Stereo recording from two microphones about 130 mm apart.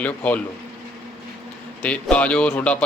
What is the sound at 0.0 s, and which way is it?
Speech, 10° left (ahead or behind).